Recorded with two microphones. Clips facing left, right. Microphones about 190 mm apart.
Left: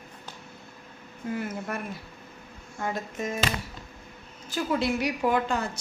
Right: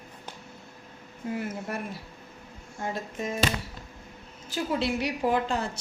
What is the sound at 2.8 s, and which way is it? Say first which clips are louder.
Speech: left 1 dB; 30° right (ahead or behind).